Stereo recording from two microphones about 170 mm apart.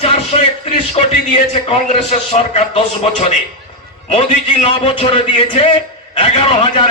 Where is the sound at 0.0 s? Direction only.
35° left (ahead or behind).